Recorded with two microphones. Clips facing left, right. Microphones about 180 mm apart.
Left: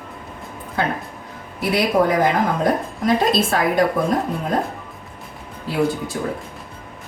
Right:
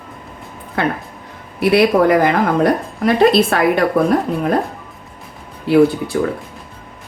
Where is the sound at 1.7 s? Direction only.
65° right (ahead or behind).